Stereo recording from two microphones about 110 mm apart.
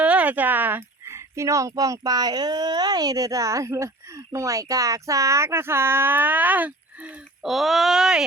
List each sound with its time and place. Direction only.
0.0 s speech: 10° right (ahead or behind)
7.4 s speech: centre (ahead or behind)